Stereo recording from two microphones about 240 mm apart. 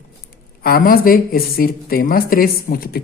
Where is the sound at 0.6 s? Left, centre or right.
Left.